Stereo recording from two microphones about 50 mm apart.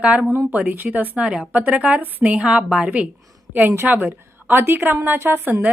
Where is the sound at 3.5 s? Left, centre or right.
Right.